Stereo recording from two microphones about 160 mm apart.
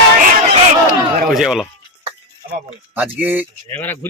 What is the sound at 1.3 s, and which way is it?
Speech, centre (ahead or behind).